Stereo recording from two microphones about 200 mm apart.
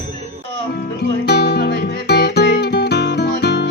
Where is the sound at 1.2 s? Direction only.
55° left (ahead or behind).